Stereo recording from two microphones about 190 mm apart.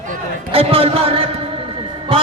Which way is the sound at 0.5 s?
30° right (ahead or behind).